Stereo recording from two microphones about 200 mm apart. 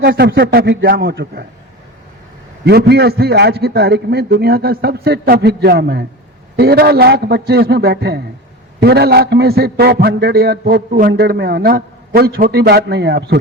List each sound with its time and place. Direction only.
0.0 s a sound: 50° right (ahead or behind)
0.3 s a man's voice: 55° right (ahead or behind)
2.6 s a man's voice: 55° right (ahead or behind)